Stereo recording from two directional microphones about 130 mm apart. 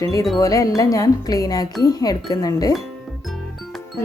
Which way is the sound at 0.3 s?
25° left (ahead or behind).